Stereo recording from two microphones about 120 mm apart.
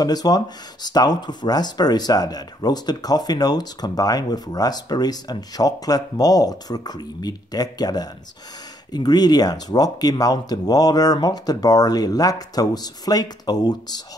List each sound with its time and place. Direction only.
0.0 s speech: 35° left (ahead or behind)